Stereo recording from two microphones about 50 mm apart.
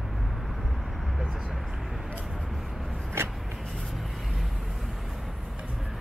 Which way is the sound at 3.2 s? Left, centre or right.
Right.